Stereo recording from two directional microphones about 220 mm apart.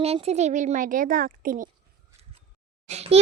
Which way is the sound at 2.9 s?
30° right (ahead or behind).